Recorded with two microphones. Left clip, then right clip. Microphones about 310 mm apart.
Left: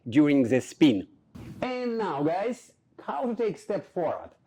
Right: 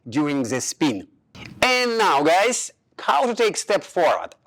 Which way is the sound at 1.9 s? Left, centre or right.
Centre.